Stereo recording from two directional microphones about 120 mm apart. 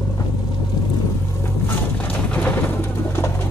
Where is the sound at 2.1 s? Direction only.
15° left (ahead or behind).